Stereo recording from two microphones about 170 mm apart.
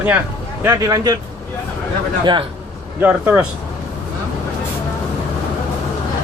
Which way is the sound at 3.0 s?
10° right (ahead or behind).